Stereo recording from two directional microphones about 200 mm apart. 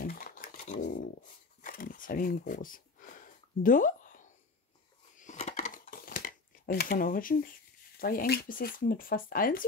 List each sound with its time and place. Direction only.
0.0 s a sound: 45° left (ahead or behind)
5.1 s crumpling: 35° left (ahead or behind)
8.0 s speech: 45° left (ahead or behind)